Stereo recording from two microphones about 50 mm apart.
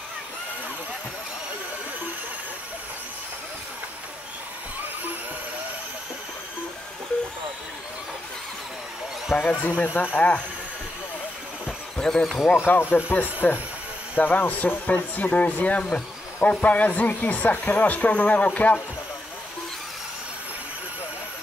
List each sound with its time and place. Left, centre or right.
9.4 s speech: left
10.1 s speech: left
12.0 s speech: centre
12.5 s speech: left
14.9 s speech: left